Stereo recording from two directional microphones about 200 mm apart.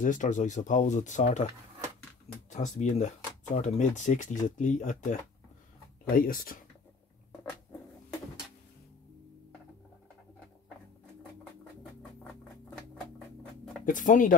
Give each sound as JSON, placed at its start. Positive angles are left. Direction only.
{"t": 0.0, "sound": "speech", "side_deg": 40}
{"t": 2.5, "sound": "speech", "side_deg": 35}
{"t": 12.0, "sound": "a sound", "side_deg": 5}
{"t": 13.8, "sound": "speech", "side_deg": 40}